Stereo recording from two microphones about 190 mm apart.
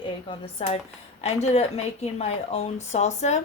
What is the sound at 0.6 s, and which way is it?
A woman's voice, 30° left (ahead or behind).